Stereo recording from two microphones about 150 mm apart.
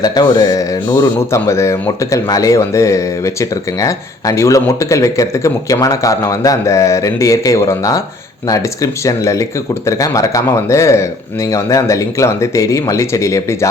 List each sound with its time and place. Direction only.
0.0 s speech: 25° left (ahead or behind)